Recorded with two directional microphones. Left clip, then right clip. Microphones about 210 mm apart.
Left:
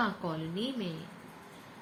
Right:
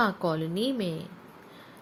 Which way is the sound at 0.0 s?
45° right (ahead or behind).